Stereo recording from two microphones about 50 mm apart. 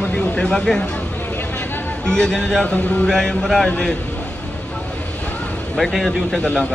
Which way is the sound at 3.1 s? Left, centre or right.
Centre.